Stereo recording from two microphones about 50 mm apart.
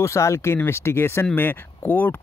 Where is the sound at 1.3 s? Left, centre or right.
Left.